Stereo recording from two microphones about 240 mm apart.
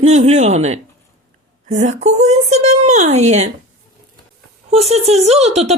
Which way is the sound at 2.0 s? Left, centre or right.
Right.